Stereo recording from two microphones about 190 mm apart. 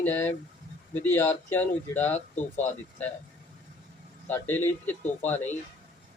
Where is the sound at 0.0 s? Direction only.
10° left (ahead or behind).